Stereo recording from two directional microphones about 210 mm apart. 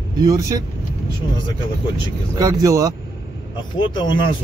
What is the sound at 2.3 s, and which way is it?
Speech, 15° right (ahead or behind).